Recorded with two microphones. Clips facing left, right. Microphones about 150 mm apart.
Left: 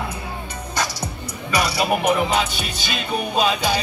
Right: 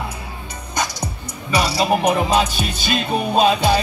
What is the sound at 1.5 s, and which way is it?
Music, 30° right (ahead or behind).